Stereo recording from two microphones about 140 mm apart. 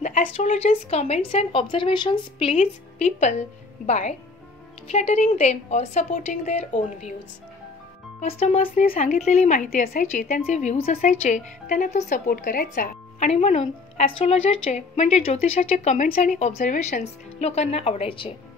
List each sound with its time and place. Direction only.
0.0 s a woman's voice: 65° left (ahead or behind)
8.2 s a woman's voice: 50° left (ahead or behind); by 10.4 s 70° left (ahead or behind)
10.4 s a woman's voice: 55° left (ahead or behind)
12.3 s a woman's voice: 90° left
13.2 s a woman's voice: 50° left (ahead or behind)
16.5 s speech: 70° left (ahead or behind); by 18.3 s 40° left (ahead or behind)